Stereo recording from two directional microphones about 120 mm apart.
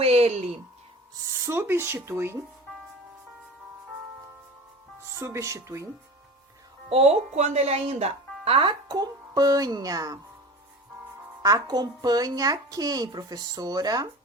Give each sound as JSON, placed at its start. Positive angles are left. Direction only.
{"t": 0.0, "sound": "a sound", "side_deg": -55}
{"t": 1.1, "sound": "speech", "side_deg": -20}
{"t": 5.0, "sound": "speech", "side_deg": -25}
{"t": 6.9, "sound": "speech", "side_deg": -60}
{"t": 8.9, "sound": "speech", "side_deg": -30}
{"t": 11.4, "sound": "speech", "side_deg": -30}